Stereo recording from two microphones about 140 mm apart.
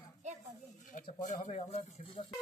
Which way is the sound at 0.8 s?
70° left (ahead or behind).